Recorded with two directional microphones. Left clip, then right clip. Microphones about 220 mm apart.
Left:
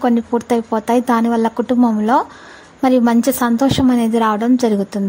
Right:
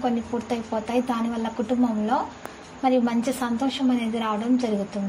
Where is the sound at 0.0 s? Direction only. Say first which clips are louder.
Left 10 dB; 45° left (ahead or behind).